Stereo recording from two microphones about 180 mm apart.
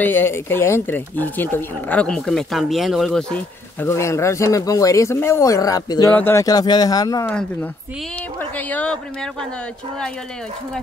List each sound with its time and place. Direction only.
0.0 s speech: 10° left (ahead or behind)
8.4 s speech: 10° left (ahead or behind)